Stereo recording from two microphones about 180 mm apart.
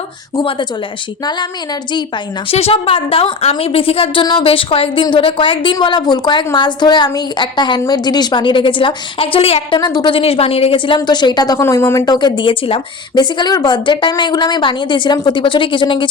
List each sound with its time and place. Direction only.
2.5 s a woman's voice: 35° left (ahead or behind)